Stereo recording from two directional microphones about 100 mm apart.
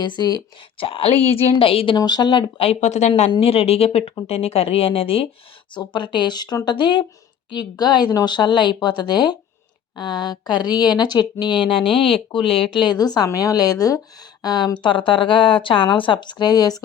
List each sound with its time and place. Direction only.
0.8 s speech: 65° left (ahead or behind)
2.0 s speech: 45° left (ahead or behind)
2.6 s speech: 70° left (ahead or behind)
5.7 s speech: 50° left (ahead or behind)
11.8 s speech: centre (ahead or behind)
12.3 s speech: 60° left (ahead or behind)
12.8 s a woman's voice: 45° left (ahead or behind)